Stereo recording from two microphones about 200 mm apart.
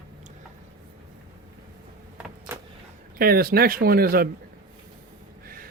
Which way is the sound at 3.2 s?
50° right (ahead or behind).